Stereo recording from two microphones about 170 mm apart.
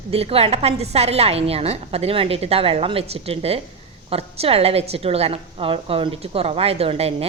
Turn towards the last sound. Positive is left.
turn(degrees=-35)  # may be behind; listen again after turning